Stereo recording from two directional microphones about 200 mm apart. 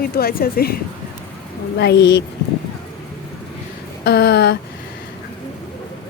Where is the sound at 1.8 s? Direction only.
55° left (ahead or behind).